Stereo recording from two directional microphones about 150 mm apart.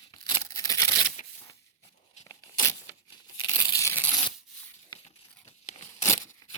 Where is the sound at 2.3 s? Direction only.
25° left (ahead or behind).